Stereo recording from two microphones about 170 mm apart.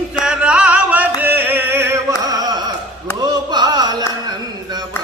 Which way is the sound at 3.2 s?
25° right (ahead or behind).